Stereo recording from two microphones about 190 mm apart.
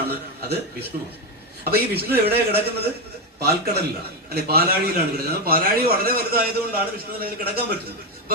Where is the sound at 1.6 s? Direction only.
55° right (ahead or behind).